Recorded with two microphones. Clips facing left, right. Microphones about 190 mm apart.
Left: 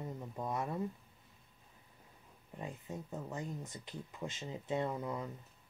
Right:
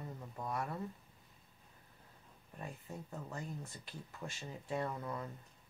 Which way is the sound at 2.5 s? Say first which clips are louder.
Left 3 dB; 20° left (ahead or behind).